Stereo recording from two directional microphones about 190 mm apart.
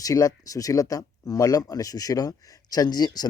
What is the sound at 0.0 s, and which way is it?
Speech, 20° left (ahead or behind).